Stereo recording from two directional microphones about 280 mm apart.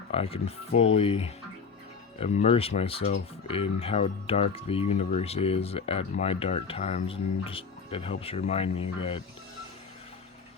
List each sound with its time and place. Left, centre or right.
0.1 s speech: left